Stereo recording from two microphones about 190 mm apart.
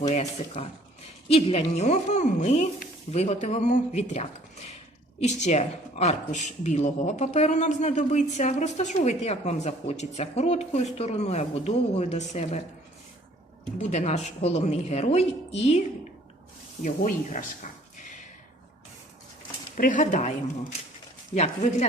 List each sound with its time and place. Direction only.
0.1 s speech: 35° left (ahead or behind)
13.9 s speech: 35° left (ahead or behind)
16.8 s speech: 40° left (ahead or behind)
19.7 s speech: 45° left (ahead or behind)